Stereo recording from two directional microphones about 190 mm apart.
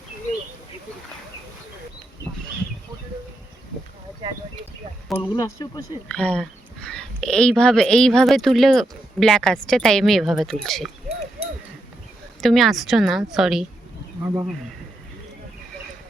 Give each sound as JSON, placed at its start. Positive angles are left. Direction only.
{"t": 5.0, "sound": "a sound", "side_deg": 10}
{"t": 5.3, "sound": "speech", "side_deg": 20}
{"t": 6.1, "sound": "speech", "side_deg": 5}
{"t": 12.4, "sound": "speech", "side_deg": 0}
{"t": 14.2, "sound": "speech", "side_deg": -20}